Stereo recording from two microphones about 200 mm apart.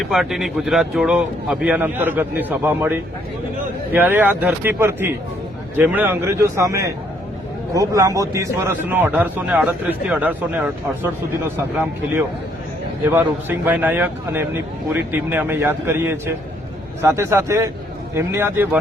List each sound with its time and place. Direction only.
0.0 s a man's voice: centre (ahead or behind)
11.5 s a man's voice: 10° right (ahead or behind)